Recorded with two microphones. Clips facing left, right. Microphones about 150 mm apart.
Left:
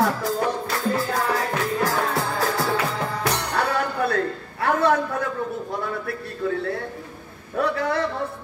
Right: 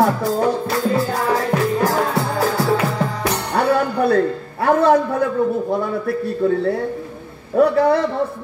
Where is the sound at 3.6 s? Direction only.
35° right (ahead or behind).